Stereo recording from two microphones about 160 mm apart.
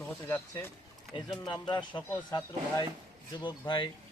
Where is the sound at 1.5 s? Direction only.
30° left (ahead or behind).